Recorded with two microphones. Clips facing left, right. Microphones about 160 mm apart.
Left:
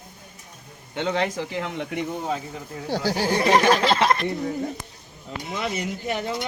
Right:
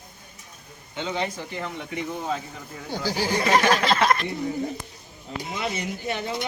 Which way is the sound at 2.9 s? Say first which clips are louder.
Left 4 dB; 70° left (ahead or behind).